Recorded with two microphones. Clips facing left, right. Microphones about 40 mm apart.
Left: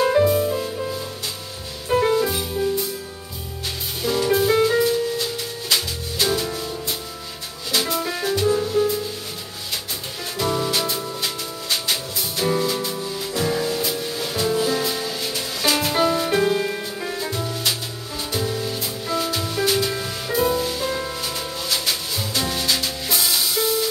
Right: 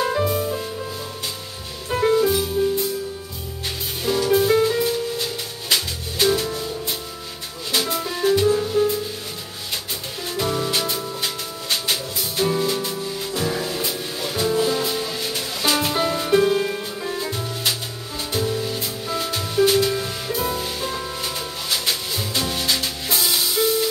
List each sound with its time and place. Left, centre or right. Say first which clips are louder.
0.0 s music: left 4 dB; centre
1.9 s music: right 1 dB; centre
4.2 s music: right 1 dB; centre
4.6 s music: left 1 dB; centre
6.2 s music: right 3 dB; centre
8.2 s music: right 4 dB; centre
10.3 s music: left 1 dB; centre
15.9 s music: even; centre